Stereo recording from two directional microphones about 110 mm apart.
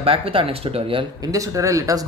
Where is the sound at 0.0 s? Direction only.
60° right (ahead or behind).